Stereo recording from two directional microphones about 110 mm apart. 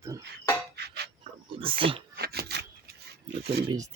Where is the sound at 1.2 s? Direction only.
55° right (ahead or behind).